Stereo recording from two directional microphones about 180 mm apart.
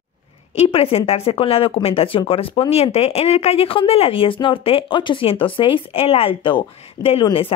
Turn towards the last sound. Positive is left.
turn(degrees=30)  # may be behind; listen again after turning